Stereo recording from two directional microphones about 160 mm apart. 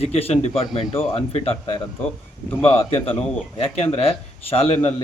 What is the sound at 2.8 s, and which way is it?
Speech, 35° left (ahead or behind).